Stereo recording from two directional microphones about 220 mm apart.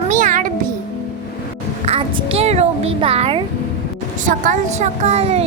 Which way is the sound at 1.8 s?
30° right (ahead or behind).